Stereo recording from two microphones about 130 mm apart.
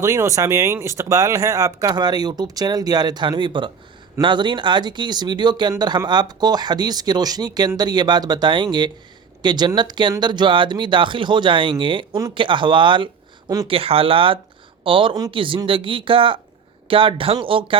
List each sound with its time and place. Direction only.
0.0 s speech: 25° right (ahead or behind); by 17.7 s 45° right (ahead or behind)